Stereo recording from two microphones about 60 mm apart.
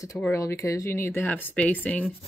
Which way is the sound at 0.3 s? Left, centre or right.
Left.